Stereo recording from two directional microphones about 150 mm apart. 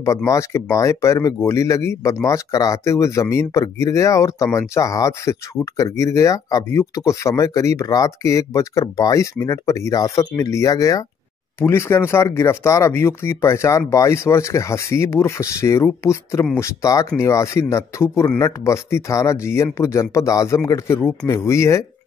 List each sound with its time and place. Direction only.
0.0 s speech: 20° left (ahead or behind)